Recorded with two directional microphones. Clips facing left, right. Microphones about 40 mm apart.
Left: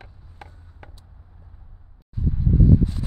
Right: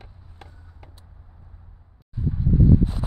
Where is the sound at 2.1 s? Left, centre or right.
Centre.